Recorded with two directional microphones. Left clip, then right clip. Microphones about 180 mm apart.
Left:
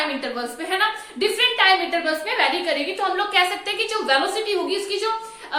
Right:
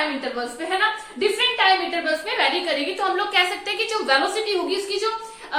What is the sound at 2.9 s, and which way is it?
A woman's voice, 5° left (ahead or behind).